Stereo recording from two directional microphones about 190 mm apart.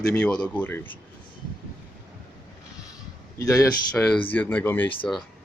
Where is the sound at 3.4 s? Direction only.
15° left (ahead or behind).